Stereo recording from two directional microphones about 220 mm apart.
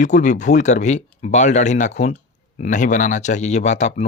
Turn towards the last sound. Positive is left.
turn(degrees=30)  # may be behind; listen again after turning